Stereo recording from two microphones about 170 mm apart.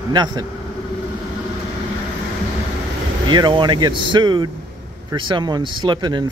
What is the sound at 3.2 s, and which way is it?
Speech, 25° right (ahead or behind).